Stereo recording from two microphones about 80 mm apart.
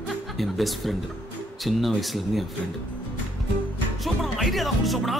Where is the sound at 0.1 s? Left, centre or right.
Centre.